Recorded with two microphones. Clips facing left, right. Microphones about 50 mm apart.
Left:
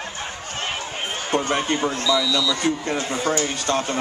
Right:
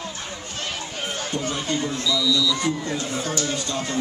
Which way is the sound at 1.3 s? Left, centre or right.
Left.